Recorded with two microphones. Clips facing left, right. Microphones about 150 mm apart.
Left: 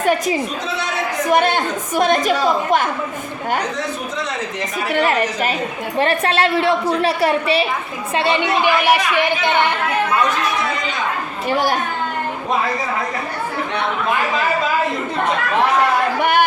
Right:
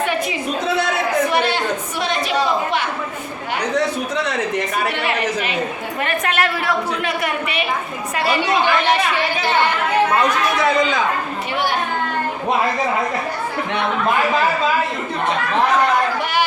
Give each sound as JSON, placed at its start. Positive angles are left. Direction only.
{"t": 0.0, "sound": "a woman's voice", "side_deg": 40}
{"t": 1.3, "sound": "a sound", "side_deg": 50}
{"t": 4.9, "sound": "a woman's voice", "side_deg": 45}
{"t": 6.0, "sound": "a woman's voice", "side_deg": 30}
{"t": 8.6, "sound": "speech", "side_deg": 10}
{"t": 11.5, "sound": "a woman's voice", "side_deg": 40}